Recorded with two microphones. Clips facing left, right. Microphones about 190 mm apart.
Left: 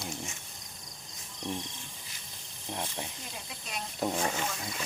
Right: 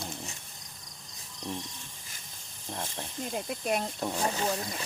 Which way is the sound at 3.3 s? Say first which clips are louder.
Right 12 dB; 55° right (ahead or behind).